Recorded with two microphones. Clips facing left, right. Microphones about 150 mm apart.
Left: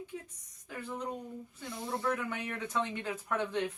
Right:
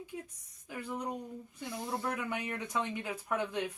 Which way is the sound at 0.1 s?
5° right (ahead or behind).